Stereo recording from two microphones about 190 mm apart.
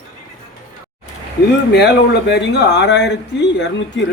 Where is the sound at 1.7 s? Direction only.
60° left (ahead or behind).